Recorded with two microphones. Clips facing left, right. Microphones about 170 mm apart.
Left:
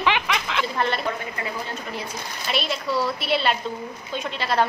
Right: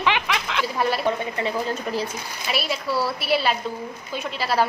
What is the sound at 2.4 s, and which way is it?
A child's voice, 5° right (ahead or behind).